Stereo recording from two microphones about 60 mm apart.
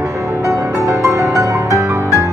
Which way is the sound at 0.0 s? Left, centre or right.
Right.